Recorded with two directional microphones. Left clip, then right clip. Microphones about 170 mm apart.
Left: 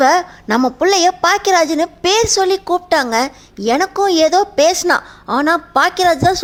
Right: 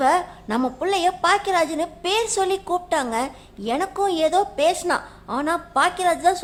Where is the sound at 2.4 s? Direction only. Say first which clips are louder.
Left 7 dB; 25° left (ahead or behind).